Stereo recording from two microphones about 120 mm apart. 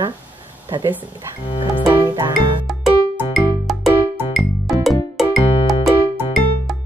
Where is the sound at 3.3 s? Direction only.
Centre (ahead or behind).